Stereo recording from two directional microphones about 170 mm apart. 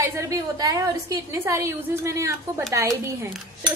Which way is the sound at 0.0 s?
15° right (ahead or behind).